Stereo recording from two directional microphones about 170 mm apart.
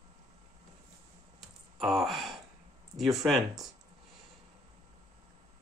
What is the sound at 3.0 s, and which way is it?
Speech, centre (ahead or behind).